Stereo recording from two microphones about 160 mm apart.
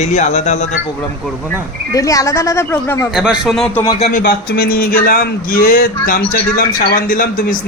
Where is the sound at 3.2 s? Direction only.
Centre (ahead or behind).